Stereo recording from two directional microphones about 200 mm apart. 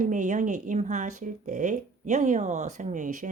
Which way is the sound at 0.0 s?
40° right (ahead or behind).